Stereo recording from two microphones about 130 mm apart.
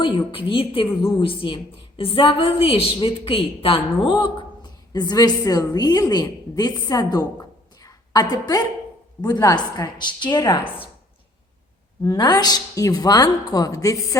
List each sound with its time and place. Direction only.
0.0 s a woman's voice: 40° left (ahead or behind)
4.9 s a woman's voice: 30° left (ahead or behind)
12.0 s a woman's voice: 30° left (ahead or behind)